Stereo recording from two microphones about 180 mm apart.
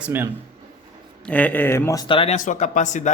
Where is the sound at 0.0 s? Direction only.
10° right (ahead or behind).